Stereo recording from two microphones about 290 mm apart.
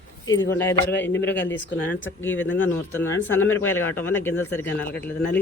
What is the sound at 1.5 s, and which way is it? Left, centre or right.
Speech, left.